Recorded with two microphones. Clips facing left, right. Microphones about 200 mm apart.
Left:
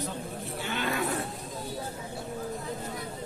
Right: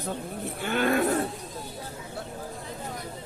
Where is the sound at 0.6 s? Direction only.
55° right (ahead or behind).